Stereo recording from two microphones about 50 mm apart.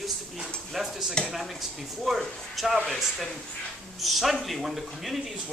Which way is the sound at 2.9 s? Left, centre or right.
Centre.